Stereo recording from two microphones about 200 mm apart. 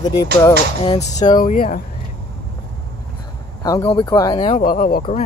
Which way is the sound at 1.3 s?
45° left (ahead or behind).